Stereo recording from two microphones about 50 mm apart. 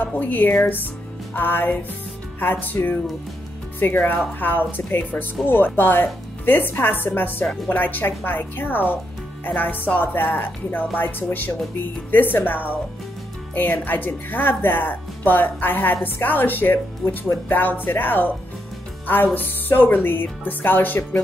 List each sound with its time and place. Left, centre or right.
0.0 s speech: left